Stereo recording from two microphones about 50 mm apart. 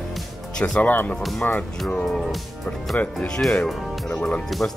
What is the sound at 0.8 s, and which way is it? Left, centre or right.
Speech, left.